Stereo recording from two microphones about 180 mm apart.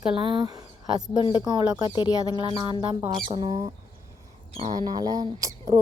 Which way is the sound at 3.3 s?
30° right (ahead or behind).